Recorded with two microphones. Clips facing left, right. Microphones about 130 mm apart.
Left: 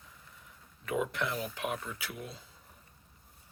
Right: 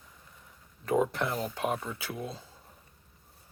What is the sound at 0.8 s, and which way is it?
Speech, 35° right (ahead or behind).